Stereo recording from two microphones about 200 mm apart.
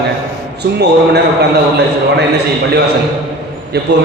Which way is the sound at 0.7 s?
55° right (ahead or behind).